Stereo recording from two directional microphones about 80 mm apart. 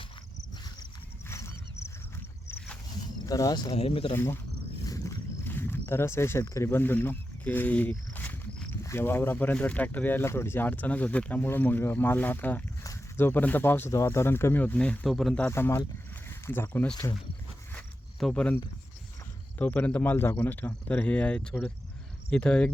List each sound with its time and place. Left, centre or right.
1.3 s horse: left
3.2 s speech: left
4.1 s speech: left
5.5 s speech: left
8.7 s speech: left
14.6 s speech: centre
15.0 s speech: centre
15.4 s speech: left
18.2 s speech: centre
19.5 s speech: left